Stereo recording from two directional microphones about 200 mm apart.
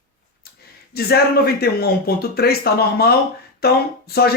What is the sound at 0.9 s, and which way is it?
Speech, 50° left (ahead or behind).